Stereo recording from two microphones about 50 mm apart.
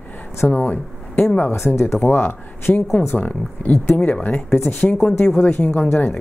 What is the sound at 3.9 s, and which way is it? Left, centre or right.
Speech, left.